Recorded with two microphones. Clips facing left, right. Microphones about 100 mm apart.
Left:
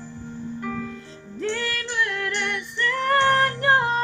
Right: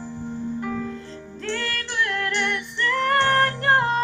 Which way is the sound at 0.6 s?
20° right (ahead or behind).